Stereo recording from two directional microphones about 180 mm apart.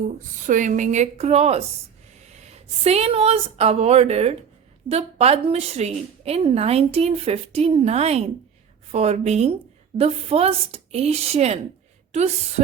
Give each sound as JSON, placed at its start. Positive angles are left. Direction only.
{"t": 0.4, "sound": "a woman's voice", "side_deg": -45}